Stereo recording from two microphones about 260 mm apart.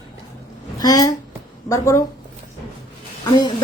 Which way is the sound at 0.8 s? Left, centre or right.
Centre.